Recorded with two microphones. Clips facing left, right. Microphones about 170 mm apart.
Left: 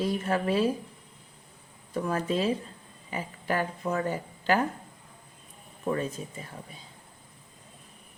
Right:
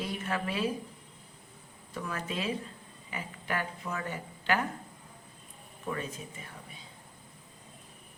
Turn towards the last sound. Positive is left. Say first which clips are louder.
# left 6 dB
turn(degrees=35)  # may be behind; listen again after turning